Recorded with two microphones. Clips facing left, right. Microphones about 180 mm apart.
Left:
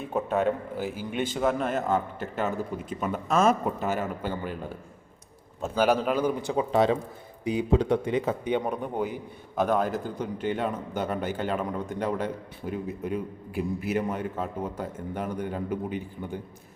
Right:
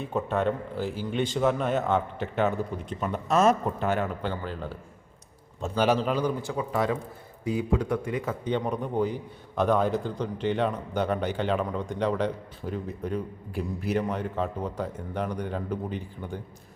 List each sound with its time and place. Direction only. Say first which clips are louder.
0.0 s a man's voice: left 1 dB; 5° left (ahead or behind)
6.3 s a man's voice: left 4 dB; 20° left (ahead or behind)